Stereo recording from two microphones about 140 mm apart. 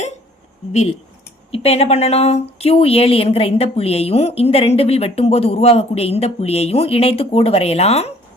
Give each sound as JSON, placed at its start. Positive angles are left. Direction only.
{"t": 0.7, "sound": "speech", "side_deg": 55}